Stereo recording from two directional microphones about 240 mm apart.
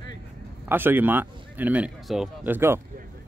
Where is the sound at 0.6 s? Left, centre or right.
Centre.